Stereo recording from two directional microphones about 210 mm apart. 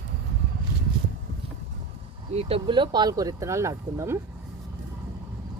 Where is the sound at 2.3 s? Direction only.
30° right (ahead or behind).